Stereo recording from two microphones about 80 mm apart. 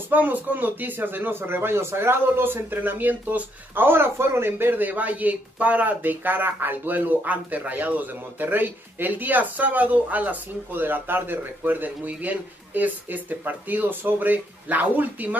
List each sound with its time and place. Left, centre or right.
0.1 s speech: right